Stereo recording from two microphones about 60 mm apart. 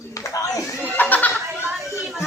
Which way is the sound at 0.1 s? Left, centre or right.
Left.